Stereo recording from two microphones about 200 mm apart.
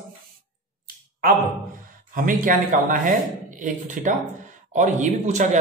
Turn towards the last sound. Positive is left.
turn(degrees=-35)  # may be behind; listen again after turning